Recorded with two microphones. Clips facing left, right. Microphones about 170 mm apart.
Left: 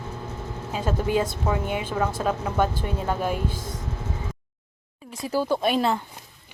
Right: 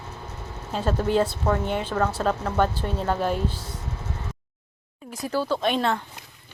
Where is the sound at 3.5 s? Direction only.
50° left (ahead or behind).